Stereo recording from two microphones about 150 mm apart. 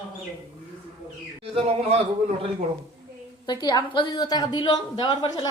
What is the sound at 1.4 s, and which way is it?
Speech, 40° right (ahead or behind).